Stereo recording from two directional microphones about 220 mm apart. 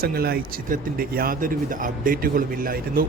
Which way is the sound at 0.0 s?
45° right (ahead or behind).